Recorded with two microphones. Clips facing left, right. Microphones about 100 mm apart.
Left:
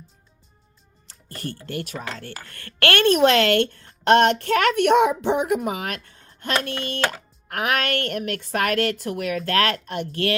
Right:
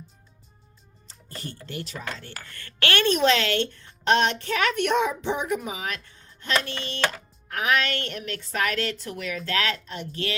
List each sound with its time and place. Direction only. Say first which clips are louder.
1.0 s a woman's voice: left 5 dB; 55° left (ahead or behind)